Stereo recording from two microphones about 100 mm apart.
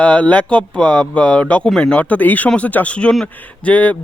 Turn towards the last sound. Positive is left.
turn(degrees=15)  # may be behind; listen again after turning